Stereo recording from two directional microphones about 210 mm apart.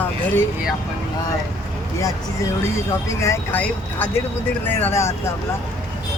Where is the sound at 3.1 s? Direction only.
15° left (ahead or behind).